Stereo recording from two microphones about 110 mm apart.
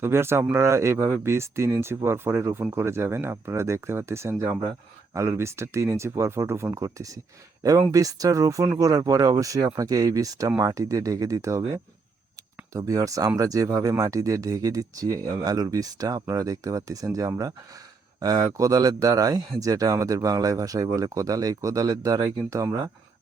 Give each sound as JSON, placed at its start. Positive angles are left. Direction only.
{"t": 0.0, "sound": "speech", "side_deg": -25}
{"t": 12.7, "sound": "speech", "side_deg": -30}